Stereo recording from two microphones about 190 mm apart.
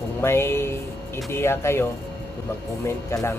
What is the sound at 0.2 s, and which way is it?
Speech, 15° left (ahead or behind).